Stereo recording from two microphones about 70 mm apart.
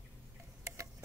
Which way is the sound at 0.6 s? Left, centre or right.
Right.